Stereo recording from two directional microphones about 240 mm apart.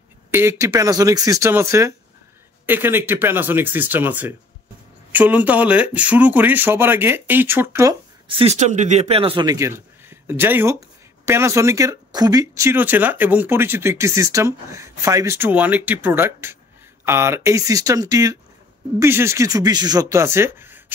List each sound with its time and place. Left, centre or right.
0.3 s speech: centre
8.4 s speech: right; by 20.8 s centre